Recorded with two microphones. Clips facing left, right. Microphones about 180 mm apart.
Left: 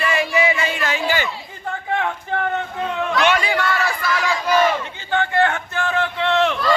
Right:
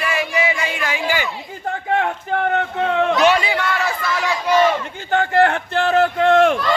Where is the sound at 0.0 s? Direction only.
5° right (ahead or behind).